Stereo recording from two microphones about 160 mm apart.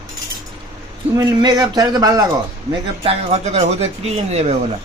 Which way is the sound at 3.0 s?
40° right (ahead or behind).